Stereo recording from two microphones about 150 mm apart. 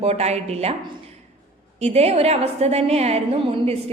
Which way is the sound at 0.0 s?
45° right (ahead or behind).